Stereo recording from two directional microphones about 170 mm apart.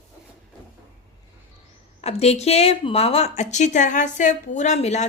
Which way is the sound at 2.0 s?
40° left (ahead or behind).